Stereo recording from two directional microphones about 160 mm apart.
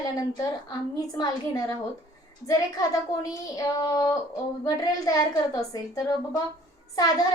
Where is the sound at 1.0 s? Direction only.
25° left (ahead or behind).